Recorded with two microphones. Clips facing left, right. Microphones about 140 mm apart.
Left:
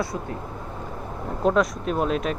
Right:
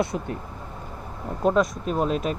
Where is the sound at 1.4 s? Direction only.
Centre (ahead or behind).